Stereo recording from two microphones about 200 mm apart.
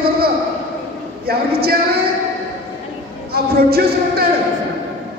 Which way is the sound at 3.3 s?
50° right (ahead or behind).